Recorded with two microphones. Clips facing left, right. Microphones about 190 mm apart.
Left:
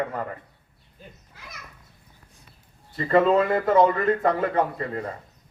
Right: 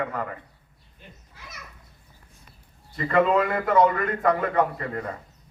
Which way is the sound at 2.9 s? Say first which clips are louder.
Left 2 dB; 35° left (ahead or behind).